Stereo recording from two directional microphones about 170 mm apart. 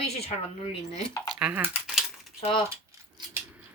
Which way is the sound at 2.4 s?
30° left (ahead or behind).